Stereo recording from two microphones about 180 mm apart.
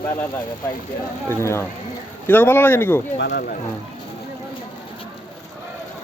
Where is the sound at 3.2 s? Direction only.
70° left (ahead or behind).